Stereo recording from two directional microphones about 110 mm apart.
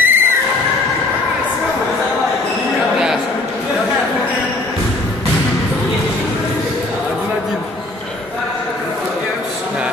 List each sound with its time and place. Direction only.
0.0 s neigh: 20° right (ahead or behind)